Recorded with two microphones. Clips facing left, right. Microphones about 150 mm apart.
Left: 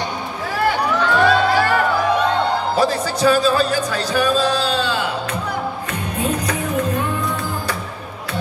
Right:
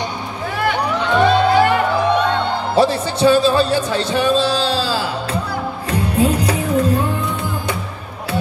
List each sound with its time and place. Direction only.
0.7 s music: 20° right (ahead or behind)
2.7 s speech: 30° right (ahead or behind)
5.9 s music: 30° right (ahead or behind)